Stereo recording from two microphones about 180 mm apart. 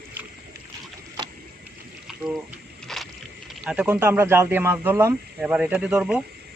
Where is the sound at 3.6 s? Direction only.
5° right (ahead or behind).